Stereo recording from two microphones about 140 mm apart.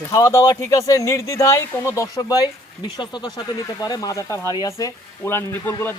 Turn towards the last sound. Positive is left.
turn(degrees=15)  # may be behind; listen again after turning